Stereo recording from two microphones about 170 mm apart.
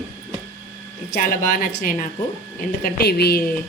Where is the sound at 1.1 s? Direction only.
55° left (ahead or behind).